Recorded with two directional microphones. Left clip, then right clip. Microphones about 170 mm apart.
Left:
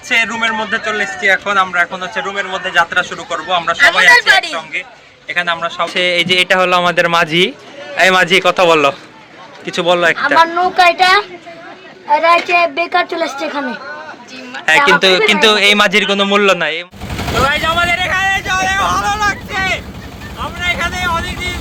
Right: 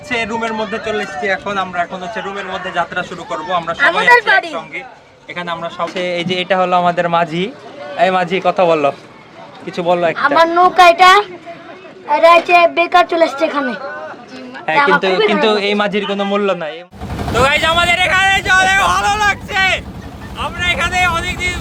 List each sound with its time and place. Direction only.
0.1 s a man's voice: 5° right (ahead or behind)
4.2 s a woman's voice: 40° right (ahead or behind)
4.5 s a man's voice: 20° right (ahead or behind)
10.4 s a woman's voice: 40° right (ahead or behind)
14.8 s speech: 5° left (ahead or behind)
15.3 s speech: 5° right (ahead or behind)
17.4 s vehicle: 55° right (ahead or behind)
18.9 s vehicle: 50° right (ahead or behind)